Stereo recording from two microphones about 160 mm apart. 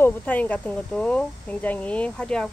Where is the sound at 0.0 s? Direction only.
10° left (ahead or behind).